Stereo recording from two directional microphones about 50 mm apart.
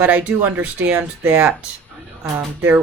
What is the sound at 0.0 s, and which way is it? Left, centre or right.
Speech, right.